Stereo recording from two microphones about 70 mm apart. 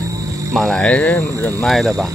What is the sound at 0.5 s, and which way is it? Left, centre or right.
Speech, centre.